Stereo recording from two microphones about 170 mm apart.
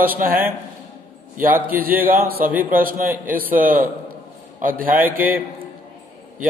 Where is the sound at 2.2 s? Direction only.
60° right (ahead or behind).